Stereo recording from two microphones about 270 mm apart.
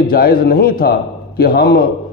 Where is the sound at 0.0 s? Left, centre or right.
Left.